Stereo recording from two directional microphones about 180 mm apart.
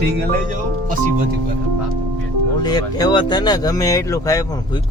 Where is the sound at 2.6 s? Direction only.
25° left (ahead or behind).